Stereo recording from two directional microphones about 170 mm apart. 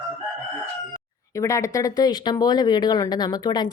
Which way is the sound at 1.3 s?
20° left (ahead or behind).